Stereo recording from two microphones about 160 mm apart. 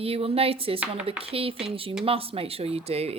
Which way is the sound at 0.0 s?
35° right (ahead or behind).